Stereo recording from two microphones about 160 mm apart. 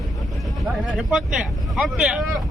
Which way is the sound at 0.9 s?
5° right (ahead or behind).